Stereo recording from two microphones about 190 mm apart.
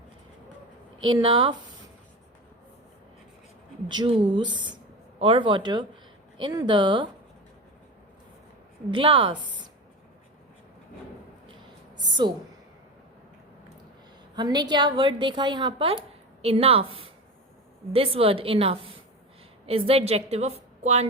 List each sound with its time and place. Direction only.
1.0 s a woman's voice: 25° right (ahead or behind)
3.8 s a woman's voice: 25° right (ahead or behind)
8.9 s a woman's voice: 25° right (ahead or behind)
11.9 s a woman's voice: 25° right (ahead or behind)
14.3 s a woman's voice: 20° right (ahead or behind)